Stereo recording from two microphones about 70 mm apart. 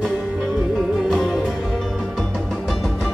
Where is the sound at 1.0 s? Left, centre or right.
Centre.